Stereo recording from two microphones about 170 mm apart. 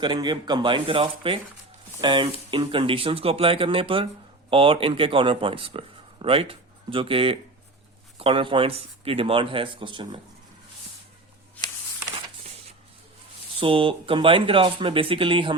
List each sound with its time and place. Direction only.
0.0 s speech: 25° right (ahead or behind)
13.6 s speech: 30° right (ahead or behind)